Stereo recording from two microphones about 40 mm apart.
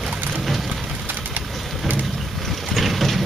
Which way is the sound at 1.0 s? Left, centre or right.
Right.